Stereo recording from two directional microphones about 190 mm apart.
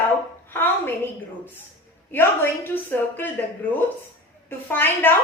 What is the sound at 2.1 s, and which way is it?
A woman's voice, 10° left (ahead or behind).